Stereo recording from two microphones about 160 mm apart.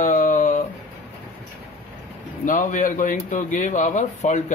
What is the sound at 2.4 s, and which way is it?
A man's voice, 55° left (ahead or behind).